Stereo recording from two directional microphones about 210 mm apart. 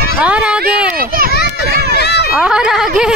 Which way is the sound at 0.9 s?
45° right (ahead or behind).